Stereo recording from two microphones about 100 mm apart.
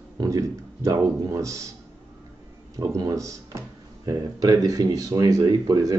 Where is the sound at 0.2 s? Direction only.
35° right (ahead or behind).